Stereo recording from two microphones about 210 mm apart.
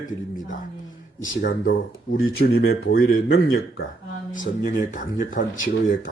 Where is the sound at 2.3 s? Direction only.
50° left (ahead or behind).